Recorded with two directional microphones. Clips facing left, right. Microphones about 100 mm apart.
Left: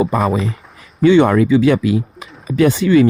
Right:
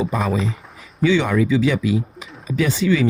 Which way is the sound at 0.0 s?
55° left (ahead or behind).